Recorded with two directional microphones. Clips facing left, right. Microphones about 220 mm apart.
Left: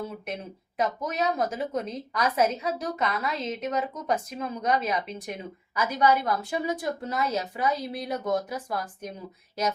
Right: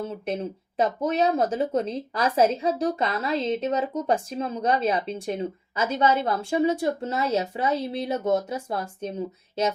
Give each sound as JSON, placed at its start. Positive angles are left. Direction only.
{"t": 0.8, "sound": "a woman's voice", "side_deg": -30}